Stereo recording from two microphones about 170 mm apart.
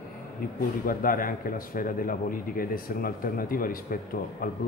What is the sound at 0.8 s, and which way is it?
Speech, 55° left (ahead or behind).